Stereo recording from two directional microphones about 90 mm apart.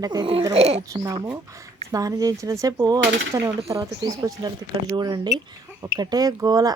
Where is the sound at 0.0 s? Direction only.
50° right (ahead or behind).